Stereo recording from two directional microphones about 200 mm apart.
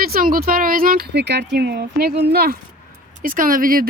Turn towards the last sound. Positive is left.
turn(degrees=-45)  # may be behind; listen again after turning